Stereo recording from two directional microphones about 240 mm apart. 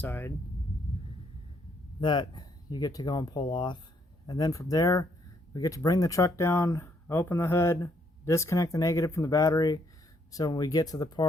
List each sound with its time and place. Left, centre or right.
0.0 s speech: centre
2.0 s speech: centre